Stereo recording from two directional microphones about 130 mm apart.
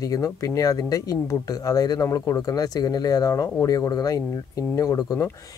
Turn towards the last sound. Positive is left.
turn(degrees=25)  # may be behind; listen again after turning